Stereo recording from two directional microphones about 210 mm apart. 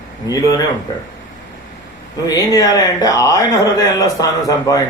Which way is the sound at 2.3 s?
15° left (ahead or behind).